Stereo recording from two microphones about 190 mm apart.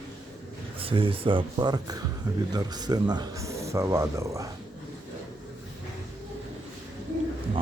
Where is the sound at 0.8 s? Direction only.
30° right (ahead or behind).